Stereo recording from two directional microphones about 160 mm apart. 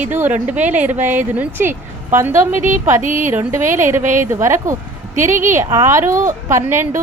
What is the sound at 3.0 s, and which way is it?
Speech, 55° right (ahead or behind).